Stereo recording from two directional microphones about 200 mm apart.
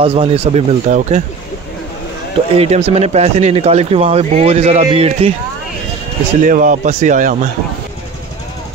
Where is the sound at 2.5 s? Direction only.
30° right (ahead or behind).